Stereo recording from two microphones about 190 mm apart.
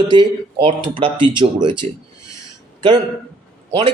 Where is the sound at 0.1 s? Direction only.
25° right (ahead or behind).